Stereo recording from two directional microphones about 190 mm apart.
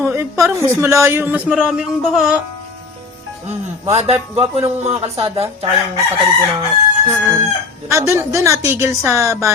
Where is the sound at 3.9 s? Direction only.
35° right (ahead or behind).